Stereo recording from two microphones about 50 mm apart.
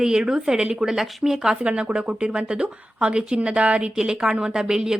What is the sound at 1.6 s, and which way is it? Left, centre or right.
Speech, right.